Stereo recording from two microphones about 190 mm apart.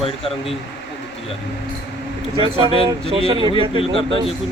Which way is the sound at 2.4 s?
30° right (ahead or behind).